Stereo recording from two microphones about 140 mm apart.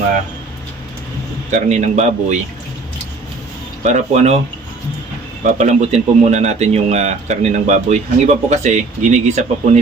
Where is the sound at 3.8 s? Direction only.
60° right (ahead or behind).